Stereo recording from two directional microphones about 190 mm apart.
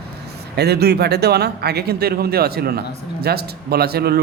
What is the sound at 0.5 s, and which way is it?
A man's voice, 60° right (ahead or behind).